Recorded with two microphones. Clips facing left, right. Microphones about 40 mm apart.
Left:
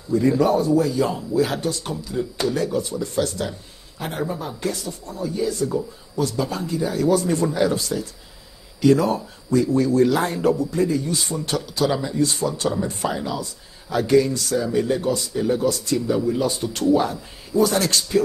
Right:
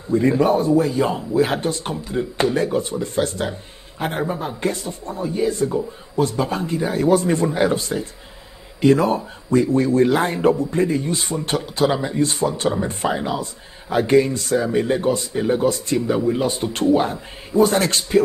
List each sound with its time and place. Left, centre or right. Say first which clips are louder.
0.1 s a man's voice: right 1 dB; right